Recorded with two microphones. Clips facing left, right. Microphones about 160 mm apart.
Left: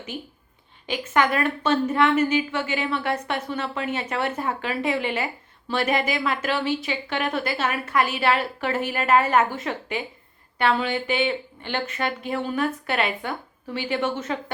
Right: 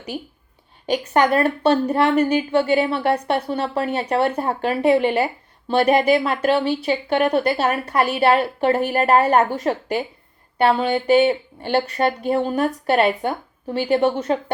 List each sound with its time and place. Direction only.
0.9 s a woman's voice: 35° right (ahead or behind)